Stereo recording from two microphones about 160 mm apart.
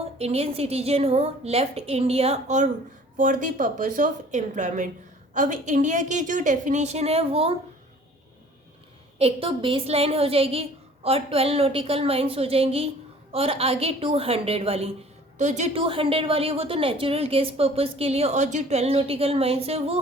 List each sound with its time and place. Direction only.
0.2 s a woman's voice: 40° right (ahead or behind)
3.2 s a woman's voice: 55° right (ahead or behind); by 7.5 s 35° right (ahead or behind)
9.1 s a woman's voice: 35° right (ahead or behind)